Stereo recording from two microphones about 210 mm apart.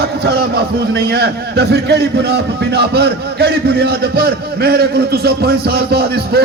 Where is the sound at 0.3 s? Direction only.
50° right (ahead or behind).